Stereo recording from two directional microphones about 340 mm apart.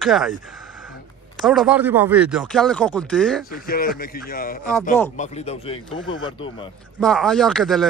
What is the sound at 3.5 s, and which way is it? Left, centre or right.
A man's voice, left.